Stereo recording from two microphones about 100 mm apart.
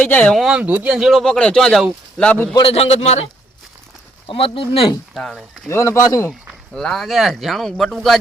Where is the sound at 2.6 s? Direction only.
80° left.